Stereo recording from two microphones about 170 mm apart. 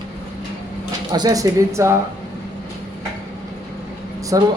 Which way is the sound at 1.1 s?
25° right (ahead or behind).